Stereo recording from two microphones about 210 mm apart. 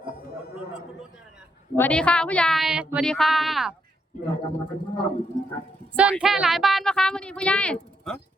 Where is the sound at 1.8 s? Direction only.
5° left (ahead or behind).